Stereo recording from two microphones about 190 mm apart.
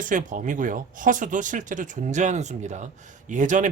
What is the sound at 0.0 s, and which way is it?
Speech, 45° right (ahead or behind).